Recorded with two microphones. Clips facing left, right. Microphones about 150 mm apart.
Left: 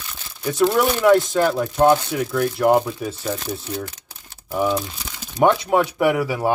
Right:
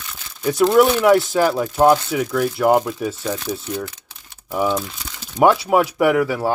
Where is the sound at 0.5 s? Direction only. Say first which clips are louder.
Right 4 dB; 5° right (ahead or behind).